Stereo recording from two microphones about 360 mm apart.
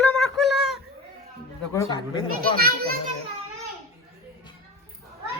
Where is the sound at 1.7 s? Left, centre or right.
Centre.